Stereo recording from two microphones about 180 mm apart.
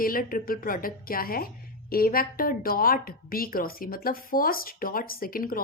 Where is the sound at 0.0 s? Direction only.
55° left (ahead or behind).